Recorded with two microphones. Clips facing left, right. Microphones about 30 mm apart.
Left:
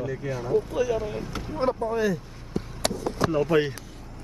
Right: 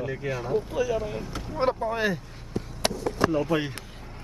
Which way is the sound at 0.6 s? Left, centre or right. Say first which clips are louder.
Left 1 dB; centre.